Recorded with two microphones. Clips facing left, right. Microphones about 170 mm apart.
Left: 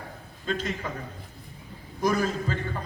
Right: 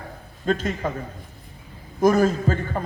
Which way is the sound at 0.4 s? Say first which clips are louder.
Right 7 dB; 50° right (ahead or behind).